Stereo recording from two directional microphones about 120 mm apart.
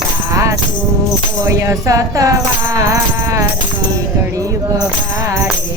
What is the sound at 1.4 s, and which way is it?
Speech, 25° right (ahead or behind).